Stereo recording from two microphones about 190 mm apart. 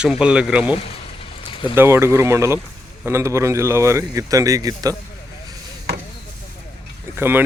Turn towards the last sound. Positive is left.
turn(degrees=-10)  # may be behind; listen again after turning